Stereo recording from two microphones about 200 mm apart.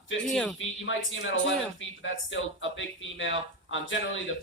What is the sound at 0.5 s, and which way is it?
Speech, 70° left (ahead or behind).